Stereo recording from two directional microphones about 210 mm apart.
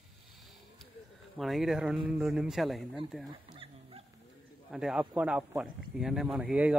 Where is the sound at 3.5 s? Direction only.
25° right (ahead or behind).